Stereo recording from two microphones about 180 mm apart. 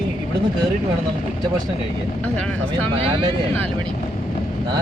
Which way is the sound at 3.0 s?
30° right (ahead or behind).